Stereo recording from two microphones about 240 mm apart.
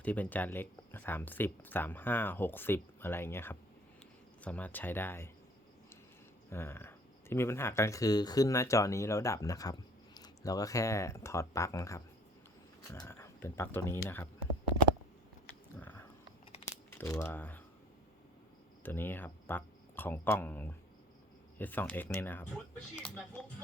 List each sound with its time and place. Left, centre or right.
0.0 s speech: centre
6.5 s speech: centre
15.8 s biting: centre
16.5 s a sound: left
16.9 s speech: centre
18.8 s speech: centre